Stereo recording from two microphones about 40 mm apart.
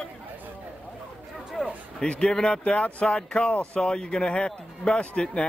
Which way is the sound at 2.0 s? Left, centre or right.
Left.